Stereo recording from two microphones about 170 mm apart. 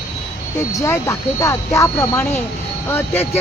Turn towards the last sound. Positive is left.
turn(degrees=15)  # may be behind; listen again after turning